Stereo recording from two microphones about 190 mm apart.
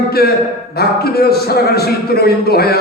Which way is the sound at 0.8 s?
55° left (ahead or behind).